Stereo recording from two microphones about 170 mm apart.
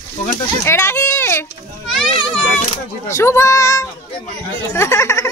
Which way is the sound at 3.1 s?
15° left (ahead or behind).